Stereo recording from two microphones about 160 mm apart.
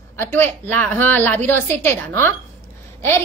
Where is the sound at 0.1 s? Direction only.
15° left (ahead or behind).